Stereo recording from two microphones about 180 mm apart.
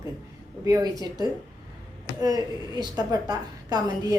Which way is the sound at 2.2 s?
20° right (ahead or behind).